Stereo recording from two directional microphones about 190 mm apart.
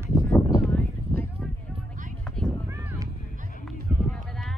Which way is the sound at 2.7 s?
10° right (ahead or behind).